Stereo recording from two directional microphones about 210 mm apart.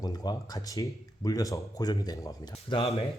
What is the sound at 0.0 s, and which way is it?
Speech, 20° left (ahead or behind).